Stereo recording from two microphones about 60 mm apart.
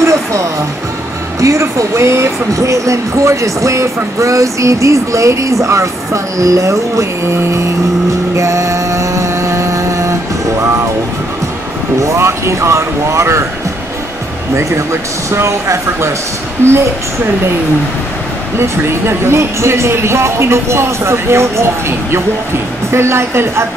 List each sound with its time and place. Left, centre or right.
0.0 s music: right
1.4 s speech: right
8.4 s a sound: right
12.0 s speech: right
14.5 s speech: right
18.6 s speech: right